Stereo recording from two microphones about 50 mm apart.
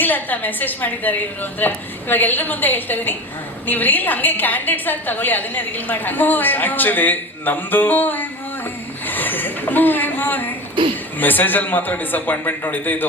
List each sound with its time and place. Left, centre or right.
0.0 s a woman's voice: left
9.0 s a sound: left
11.2 s a woman's voice: left